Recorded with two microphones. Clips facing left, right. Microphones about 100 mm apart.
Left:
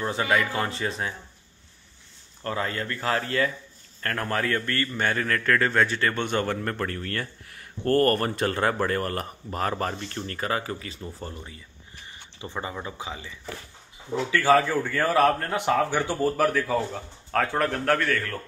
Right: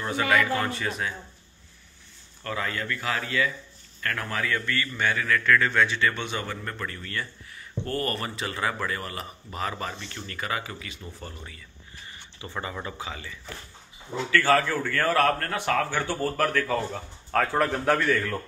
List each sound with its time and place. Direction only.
0.0 s speech: 25° left (ahead or behind)
2.4 s a man's voice: 30° left (ahead or behind); by 18.4 s 10° right (ahead or behind)